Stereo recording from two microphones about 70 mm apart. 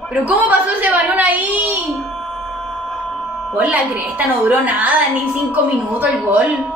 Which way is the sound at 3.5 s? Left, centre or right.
Right.